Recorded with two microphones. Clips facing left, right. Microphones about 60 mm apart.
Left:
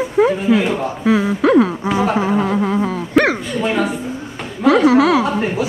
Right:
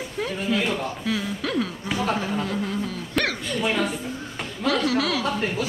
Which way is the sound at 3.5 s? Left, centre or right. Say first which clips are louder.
Left 6 dB; centre.